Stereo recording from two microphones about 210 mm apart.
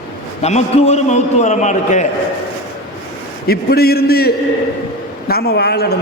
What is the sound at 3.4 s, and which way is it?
A man's voice, 45° left (ahead or behind).